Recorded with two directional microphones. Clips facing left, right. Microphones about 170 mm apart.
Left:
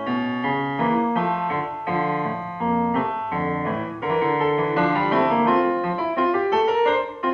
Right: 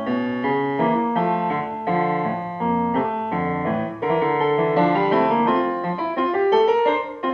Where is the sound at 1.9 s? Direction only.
25° right (ahead or behind).